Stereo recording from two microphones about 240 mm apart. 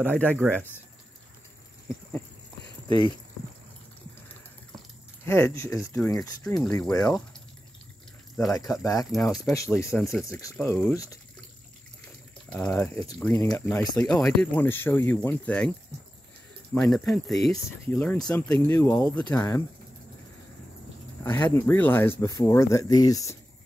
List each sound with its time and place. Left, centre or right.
0.0 s speech: centre
4.3 s a sound: centre
5.9 s speech: centre
8.5 s speech: centre
9.1 s speech: centre
9.4 s speech: centre
12.4 s speech: centre
16.7 s speech: centre
21.2 s speech: centre